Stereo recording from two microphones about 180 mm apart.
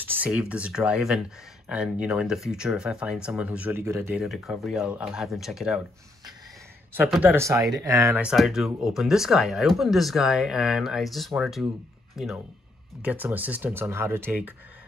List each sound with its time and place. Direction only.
0.0 s speech: 10° right (ahead or behind)
4.2 s speech: centre (ahead or behind)
7.1 s speech: centre (ahead or behind)
7.3 s speech: 15° right (ahead or behind)
8.2 s speech: 5° right (ahead or behind)